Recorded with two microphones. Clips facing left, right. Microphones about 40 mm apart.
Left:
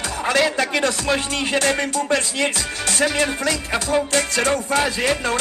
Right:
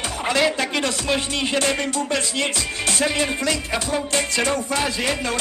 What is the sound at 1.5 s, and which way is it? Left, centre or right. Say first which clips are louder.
Music: left 3 dB; left.